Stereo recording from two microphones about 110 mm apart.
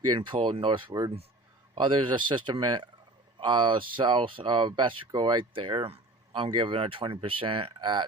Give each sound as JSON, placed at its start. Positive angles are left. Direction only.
{"t": 0.1, "sound": "speech", "side_deg": -50}